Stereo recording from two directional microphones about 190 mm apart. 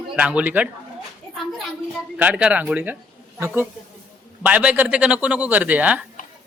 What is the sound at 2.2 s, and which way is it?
A man's voice, 5° right (ahead or behind).